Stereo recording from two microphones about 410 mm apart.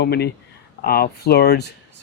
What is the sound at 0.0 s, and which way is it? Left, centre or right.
Speech, left.